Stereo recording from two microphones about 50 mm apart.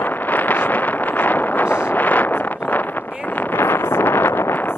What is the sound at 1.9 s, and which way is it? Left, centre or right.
Wind noise, left.